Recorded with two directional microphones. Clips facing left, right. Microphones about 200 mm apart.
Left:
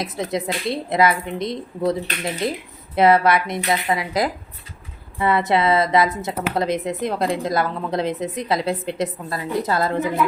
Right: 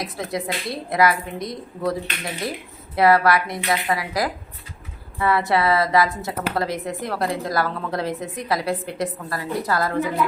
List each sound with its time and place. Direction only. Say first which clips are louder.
0.0 s a woman's voice: left 3 dB; 20° left (ahead or behind)